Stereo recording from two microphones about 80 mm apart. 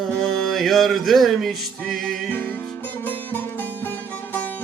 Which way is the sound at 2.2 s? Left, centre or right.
Left.